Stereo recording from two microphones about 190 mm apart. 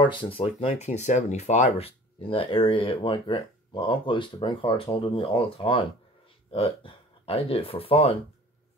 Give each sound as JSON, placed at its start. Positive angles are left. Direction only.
{"t": 0.0, "sound": "speech", "side_deg": 25}